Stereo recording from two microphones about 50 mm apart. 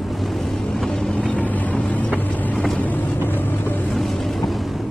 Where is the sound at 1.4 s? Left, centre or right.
Left.